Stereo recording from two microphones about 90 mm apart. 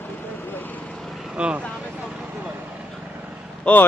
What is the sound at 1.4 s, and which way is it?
Speech, 10° right (ahead or behind).